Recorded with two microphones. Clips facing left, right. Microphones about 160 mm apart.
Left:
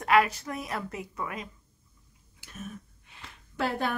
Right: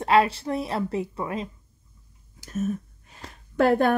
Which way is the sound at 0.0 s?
30° right (ahead or behind).